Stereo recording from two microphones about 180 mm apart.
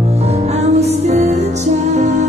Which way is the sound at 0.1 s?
35° right (ahead or behind).